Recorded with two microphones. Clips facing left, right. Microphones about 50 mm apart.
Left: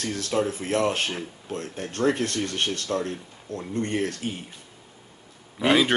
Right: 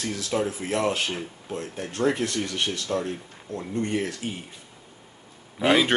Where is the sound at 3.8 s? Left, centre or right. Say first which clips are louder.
Left 1 dB; left.